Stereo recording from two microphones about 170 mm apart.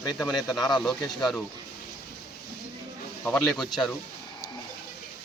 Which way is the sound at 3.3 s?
5° left (ahead or behind).